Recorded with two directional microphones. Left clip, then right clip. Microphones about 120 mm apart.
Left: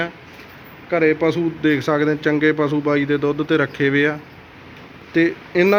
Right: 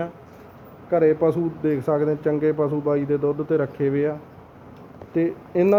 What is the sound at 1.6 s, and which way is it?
Speech, 5° left (ahead or behind).